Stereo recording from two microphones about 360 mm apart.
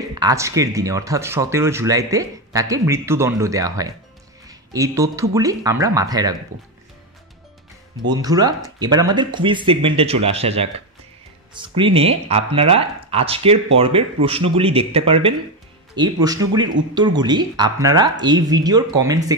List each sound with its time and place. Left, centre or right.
0.1 s speech: centre
8.1 s speech: centre